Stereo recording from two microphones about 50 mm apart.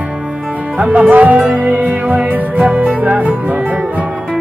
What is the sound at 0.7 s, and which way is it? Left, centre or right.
Music, right.